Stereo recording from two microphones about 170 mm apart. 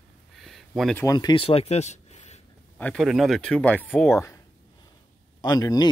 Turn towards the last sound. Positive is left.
turn(degrees=20)  # may be behind; listen again after turning